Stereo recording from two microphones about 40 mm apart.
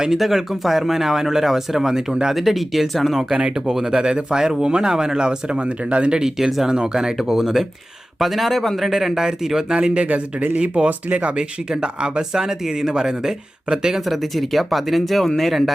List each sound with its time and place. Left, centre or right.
0.2 s speech: centre
2.3 s speech: centre; by 11.3 s right
11.3 s speech: right
14.0 s speech: centre